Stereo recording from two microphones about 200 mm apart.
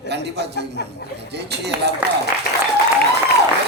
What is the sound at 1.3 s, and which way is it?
Speech, 55° right (ahead or behind).